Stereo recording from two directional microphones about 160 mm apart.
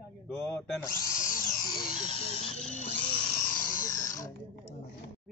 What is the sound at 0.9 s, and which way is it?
Speech, 20° left (ahead or behind).